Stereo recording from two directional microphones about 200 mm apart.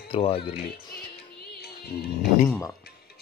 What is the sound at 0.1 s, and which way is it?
Speech, 30° left (ahead or behind).